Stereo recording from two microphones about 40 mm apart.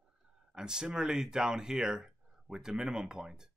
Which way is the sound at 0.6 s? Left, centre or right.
Centre.